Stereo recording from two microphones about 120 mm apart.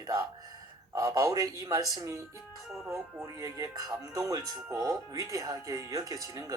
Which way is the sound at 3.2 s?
30° right (ahead or behind).